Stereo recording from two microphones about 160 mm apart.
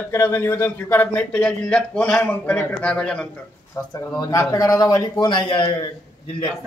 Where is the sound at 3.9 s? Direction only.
25° left (ahead or behind).